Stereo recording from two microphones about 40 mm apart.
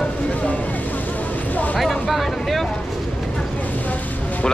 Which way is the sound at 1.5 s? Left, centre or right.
Left.